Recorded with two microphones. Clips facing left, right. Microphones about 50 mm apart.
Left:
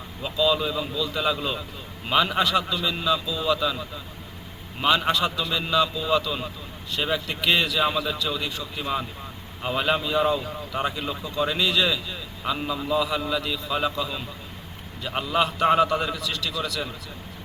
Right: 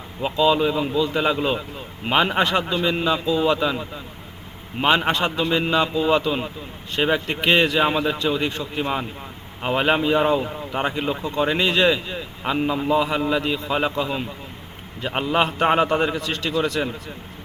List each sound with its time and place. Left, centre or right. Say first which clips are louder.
0.2 s a man's voice: right 5 dB; right